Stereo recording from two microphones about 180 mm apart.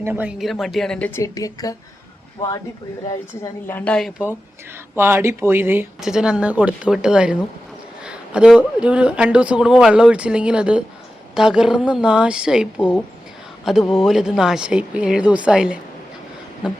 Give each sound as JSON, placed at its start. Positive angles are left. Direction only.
{"t": 0.0, "sound": "speech", "side_deg": -10}
{"t": 1.2, "sound": "a woman's voice", "side_deg": 20}
{"t": 3.1, "sound": "a woman's voice", "side_deg": 15}
{"t": 4.9, "sound": "speech", "side_deg": -15}